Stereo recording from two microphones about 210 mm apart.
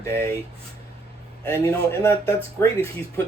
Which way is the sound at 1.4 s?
15° left (ahead or behind).